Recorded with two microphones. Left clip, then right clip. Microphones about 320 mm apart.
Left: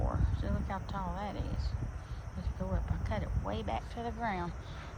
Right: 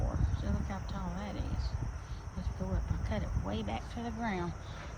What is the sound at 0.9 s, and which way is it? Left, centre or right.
Speech, centre.